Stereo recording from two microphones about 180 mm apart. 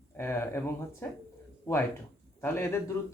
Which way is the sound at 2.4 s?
15° left (ahead or behind).